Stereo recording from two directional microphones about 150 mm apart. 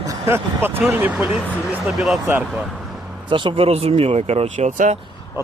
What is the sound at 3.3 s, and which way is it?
Speech, 35° right (ahead or behind).